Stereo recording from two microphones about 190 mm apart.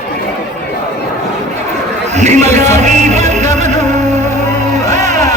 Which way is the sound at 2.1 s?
35° right (ahead or behind).